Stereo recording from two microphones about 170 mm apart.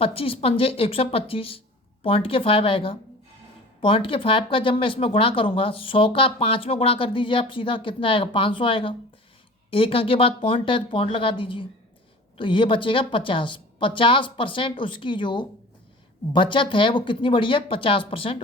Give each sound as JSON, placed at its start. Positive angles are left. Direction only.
{"t": 0.0, "sound": "a woman's voice", "side_deg": 35}